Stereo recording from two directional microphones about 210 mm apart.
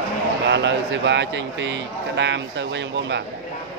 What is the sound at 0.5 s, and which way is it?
Speech, 60° right (ahead or behind).